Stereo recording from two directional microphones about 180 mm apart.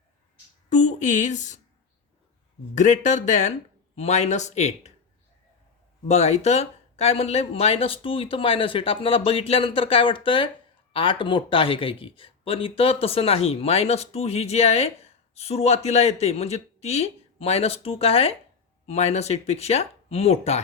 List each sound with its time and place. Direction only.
0.7 s a woman's voice: 40° left (ahead or behind)
2.7 s a woman's voice: 40° left (ahead or behind)
6.1 s speech: 35° left (ahead or behind)